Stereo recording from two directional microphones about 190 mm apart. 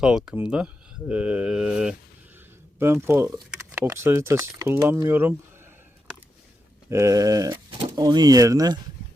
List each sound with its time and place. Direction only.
0.0 s speech: 5° right (ahead or behind)
6.9 s speech: 15° right (ahead or behind)